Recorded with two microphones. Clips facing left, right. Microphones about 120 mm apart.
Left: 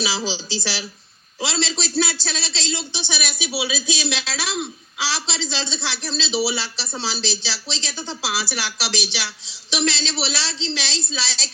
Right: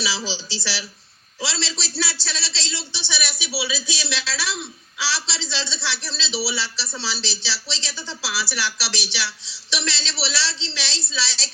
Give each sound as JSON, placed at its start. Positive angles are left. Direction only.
{"t": 0.3, "sound": "a man's voice", "side_deg": 15}
{"t": 7.9, "sound": "speech", "side_deg": 50}
{"t": 8.2, "sound": "speech", "side_deg": 20}